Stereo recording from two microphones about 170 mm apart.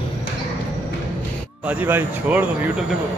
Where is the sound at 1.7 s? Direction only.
10° right (ahead or behind).